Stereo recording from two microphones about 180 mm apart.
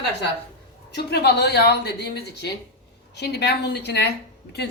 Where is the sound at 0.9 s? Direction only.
65° left (ahead or behind).